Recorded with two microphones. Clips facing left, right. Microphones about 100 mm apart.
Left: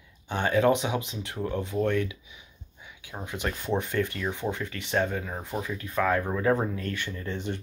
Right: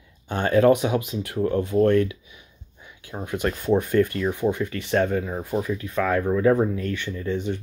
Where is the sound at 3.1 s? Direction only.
5° right (ahead or behind).